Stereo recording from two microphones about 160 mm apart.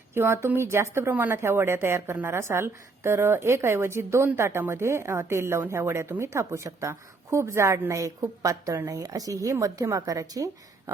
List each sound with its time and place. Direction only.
0.1 s a woman's voice: 15° right (ahead or behind)